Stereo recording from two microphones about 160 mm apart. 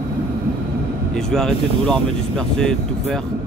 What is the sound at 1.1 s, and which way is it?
Speech, 5° left (ahead or behind).